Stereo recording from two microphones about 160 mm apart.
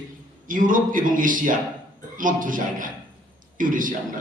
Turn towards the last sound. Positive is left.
turn(degrees=-55)  # may be behind; listen again after turning